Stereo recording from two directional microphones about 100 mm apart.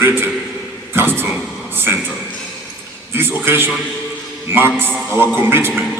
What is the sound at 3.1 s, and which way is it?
A man's voice, 25° right (ahead or behind).